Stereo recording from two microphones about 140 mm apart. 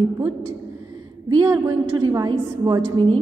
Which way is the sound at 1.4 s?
20° right (ahead or behind).